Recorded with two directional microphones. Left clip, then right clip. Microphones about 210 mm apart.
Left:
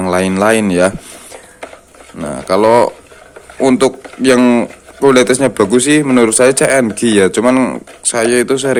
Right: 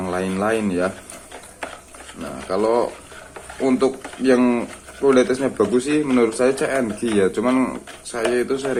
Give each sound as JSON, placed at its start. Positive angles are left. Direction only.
{"t": 0.0, "sound": "speech", "side_deg": 50}
{"t": 2.5, "sound": "speech", "side_deg": 50}